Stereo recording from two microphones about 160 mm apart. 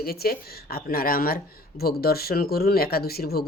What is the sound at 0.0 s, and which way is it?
Speech, 70° left (ahead or behind).